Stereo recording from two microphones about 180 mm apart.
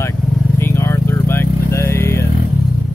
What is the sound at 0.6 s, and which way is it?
Vehicle, 15° left (ahead or behind).